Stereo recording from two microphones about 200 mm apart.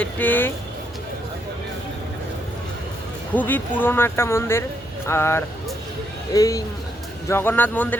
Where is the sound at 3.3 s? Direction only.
10° left (ahead or behind).